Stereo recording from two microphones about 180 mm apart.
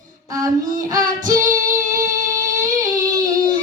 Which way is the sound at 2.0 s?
20° right (ahead or behind).